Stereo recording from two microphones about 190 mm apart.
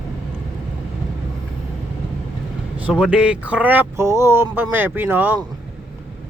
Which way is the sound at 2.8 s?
5° right (ahead or behind).